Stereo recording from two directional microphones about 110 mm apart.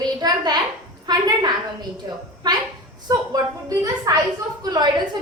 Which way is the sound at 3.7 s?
30° right (ahead or behind).